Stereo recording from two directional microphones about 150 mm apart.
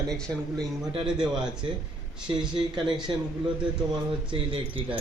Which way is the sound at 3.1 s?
35° right (ahead or behind).